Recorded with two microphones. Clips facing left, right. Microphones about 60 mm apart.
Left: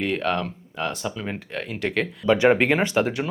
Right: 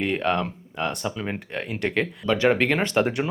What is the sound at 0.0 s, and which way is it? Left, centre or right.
Speech, centre.